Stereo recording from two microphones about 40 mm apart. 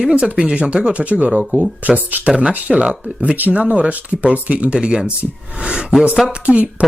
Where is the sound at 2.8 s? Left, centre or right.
Right.